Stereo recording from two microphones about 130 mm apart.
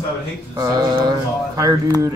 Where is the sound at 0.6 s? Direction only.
30° right (ahead or behind).